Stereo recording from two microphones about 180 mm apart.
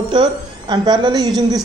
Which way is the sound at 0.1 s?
25° right (ahead or behind).